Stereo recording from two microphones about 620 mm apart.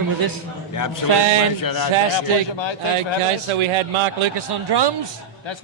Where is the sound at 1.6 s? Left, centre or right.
Left.